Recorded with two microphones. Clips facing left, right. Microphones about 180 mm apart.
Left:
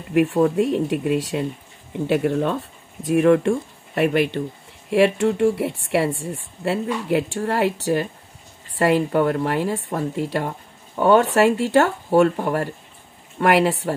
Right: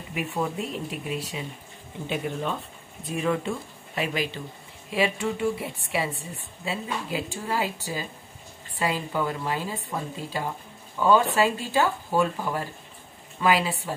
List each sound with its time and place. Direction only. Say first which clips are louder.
0.1 s speech: left 12 dB; 70° left (ahead or behind)
3.0 s speech: left 11 dB; 70° left (ahead or behind)